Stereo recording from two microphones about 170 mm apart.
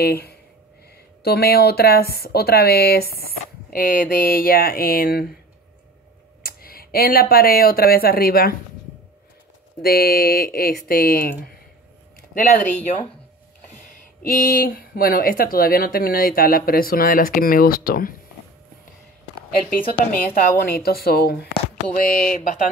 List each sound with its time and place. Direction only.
0.0 s speech: 65° left (ahead or behind)
6.4 s speech: 60° left (ahead or behind)
9.8 s speech: 65° left (ahead or behind)
14.2 s speech: 55° left (ahead or behind)
20.1 s speech: 55° left (ahead or behind)
21.9 s a sound: 55° left (ahead or behind)